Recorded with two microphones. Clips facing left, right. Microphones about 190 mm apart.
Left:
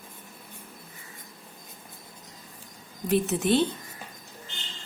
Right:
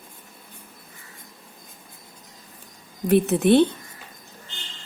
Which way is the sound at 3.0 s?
60° right (ahead or behind).